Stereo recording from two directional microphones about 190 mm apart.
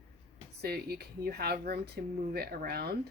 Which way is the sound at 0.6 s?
55° right (ahead or behind).